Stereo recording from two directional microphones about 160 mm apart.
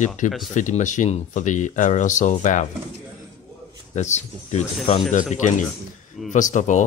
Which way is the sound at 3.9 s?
45° left (ahead or behind).